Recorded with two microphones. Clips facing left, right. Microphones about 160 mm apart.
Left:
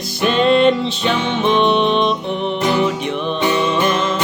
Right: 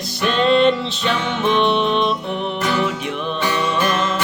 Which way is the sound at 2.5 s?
20° left (ahead or behind).